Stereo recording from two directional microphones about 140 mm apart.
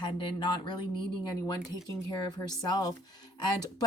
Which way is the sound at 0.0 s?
35° left (ahead or behind).